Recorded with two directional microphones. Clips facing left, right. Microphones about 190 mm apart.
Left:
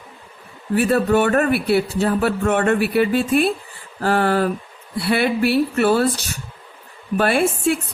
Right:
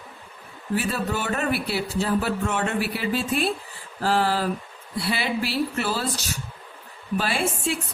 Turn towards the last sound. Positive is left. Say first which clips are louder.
# left 8 dB
turn(degrees=55)  # may be behind; listen again after turning